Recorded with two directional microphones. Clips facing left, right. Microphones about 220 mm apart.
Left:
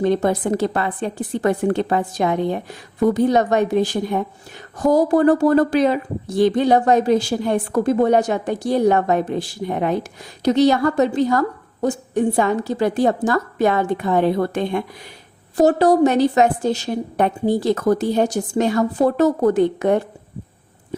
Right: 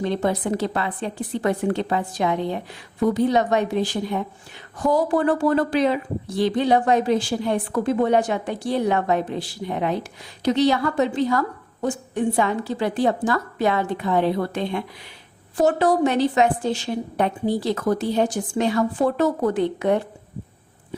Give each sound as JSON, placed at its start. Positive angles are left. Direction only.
{"t": 0.0, "sound": "speech", "side_deg": 45}